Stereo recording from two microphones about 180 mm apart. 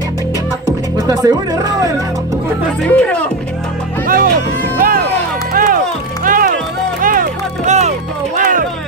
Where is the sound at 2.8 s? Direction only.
5° left (ahead or behind).